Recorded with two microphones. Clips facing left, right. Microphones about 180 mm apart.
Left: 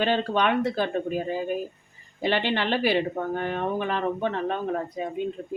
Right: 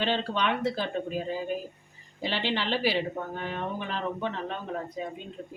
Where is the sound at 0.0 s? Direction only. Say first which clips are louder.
Left 5 dB; 50° left (ahead or behind).